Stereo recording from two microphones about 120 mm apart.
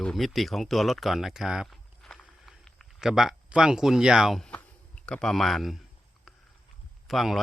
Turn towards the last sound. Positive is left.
turn(degrees=0)  # may be behind; listen again after turning